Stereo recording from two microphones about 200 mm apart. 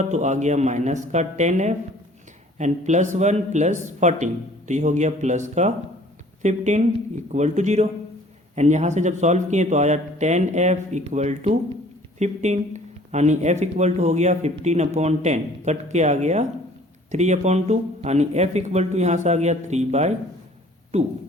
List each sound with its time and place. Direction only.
0.0 s speech: 35° right (ahead or behind)